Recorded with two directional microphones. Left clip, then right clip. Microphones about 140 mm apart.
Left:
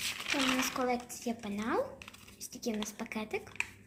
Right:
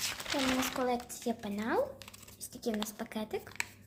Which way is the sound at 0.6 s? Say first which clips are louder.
Even; 30° right (ahead or behind).